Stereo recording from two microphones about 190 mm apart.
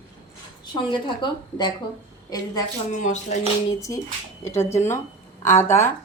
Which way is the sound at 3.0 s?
40° left (ahead or behind).